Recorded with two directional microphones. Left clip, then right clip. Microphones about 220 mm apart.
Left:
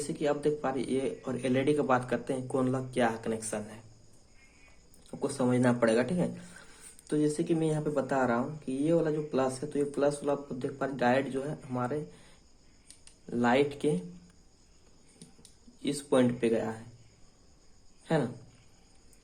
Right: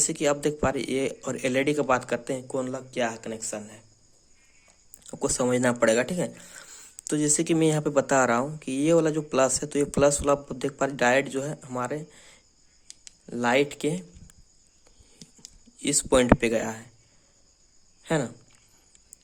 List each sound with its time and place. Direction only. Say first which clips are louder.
0.1 s speech: right 4 dB; 40° right (ahead or behind); by 3.8 s 20° right (ahead or behind)
5.2 s speech: right 4 dB; 35° right (ahead or behind)
13.1 s speech: right 3 dB; 30° right (ahead or behind)
15.2 s a sound: right 8 dB; 30° right (ahead or behind)
18.0 s speech: right 3 dB; 30° right (ahead or behind)